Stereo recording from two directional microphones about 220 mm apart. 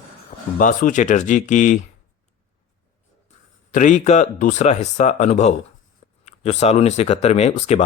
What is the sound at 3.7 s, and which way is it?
Speech, 35° left (ahead or behind).